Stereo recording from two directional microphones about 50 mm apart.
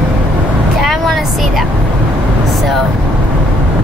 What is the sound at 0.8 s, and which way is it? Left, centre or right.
Speech, centre.